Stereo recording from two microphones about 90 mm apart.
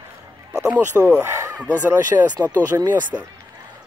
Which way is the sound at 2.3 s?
50° right (ahead or behind).